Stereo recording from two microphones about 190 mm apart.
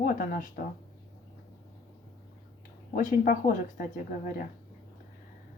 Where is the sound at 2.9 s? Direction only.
45° left (ahead or behind).